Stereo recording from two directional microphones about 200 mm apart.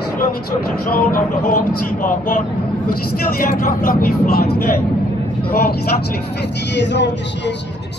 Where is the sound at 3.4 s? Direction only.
45° left (ahead or behind); by 7.5 s 60° left (ahead or behind).